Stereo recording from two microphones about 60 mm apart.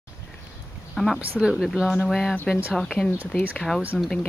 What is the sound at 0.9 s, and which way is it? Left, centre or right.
Speech, centre.